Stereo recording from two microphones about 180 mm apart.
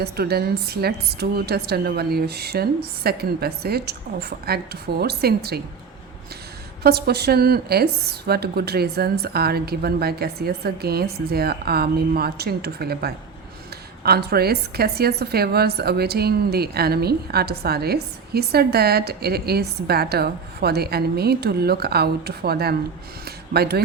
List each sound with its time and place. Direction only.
0.0 s a woman's voice: 60° right (ahead or behind)
6.8 s a woman's voice: 65° right (ahead or behind)